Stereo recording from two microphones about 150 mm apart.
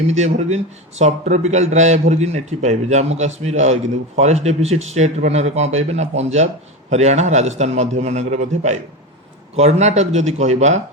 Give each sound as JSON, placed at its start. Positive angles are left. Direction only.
{"t": 0.1, "sound": "speech", "side_deg": -50}